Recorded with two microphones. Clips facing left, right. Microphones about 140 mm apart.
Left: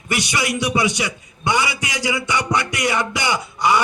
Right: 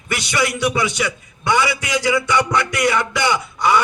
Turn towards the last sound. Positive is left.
turn(degrees=20)  # may be behind; listen again after turning